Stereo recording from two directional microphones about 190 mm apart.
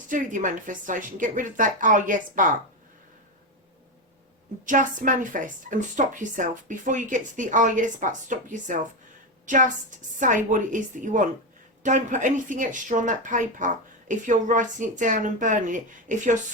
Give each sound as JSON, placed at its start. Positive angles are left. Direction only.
{"t": 0.1, "sound": "a woman's voice", "side_deg": -45}
{"t": 4.6, "sound": "a woman's voice", "side_deg": -45}